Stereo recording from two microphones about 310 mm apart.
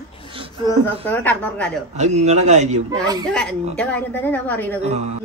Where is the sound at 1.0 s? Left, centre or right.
Centre.